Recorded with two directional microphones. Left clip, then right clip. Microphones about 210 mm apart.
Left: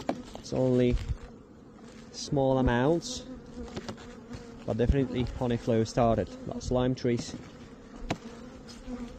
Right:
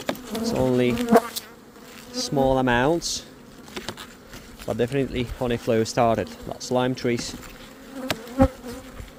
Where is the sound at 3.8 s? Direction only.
30° right (ahead or behind).